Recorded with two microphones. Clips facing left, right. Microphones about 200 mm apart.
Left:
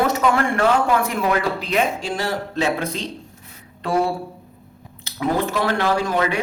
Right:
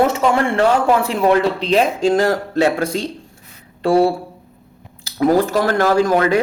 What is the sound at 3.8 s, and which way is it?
Speech, 30° right (ahead or behind).